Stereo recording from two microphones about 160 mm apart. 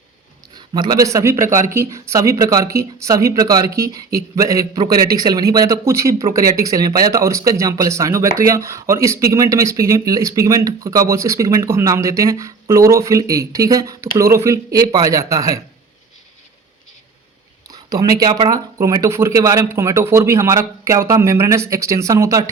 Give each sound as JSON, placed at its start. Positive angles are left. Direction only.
{"t": 0.5, "sound": "a man's voice", "side_deg": -25}
{"t": 17.7, "sound": "speech", "side_deg": -25}